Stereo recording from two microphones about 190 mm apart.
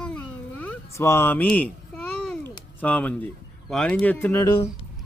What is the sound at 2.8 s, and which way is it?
Speech, 10° left (ahead or behind).